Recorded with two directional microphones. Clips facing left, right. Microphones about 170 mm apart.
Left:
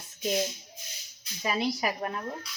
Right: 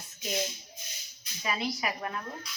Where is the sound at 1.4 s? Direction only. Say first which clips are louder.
Left 4 dB; 40° left (ahead or behind).